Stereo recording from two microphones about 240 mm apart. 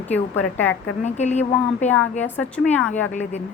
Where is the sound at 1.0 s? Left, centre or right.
Left.